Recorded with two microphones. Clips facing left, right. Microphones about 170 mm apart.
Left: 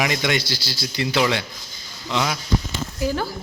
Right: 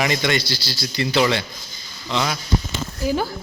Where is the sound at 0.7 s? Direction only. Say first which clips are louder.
Right 1 dB; 20° left (ahead or behind).